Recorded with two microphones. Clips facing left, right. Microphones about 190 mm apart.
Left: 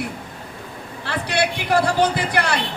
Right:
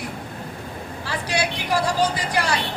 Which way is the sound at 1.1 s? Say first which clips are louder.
Left 3 dB; 60° left (ahead or behind).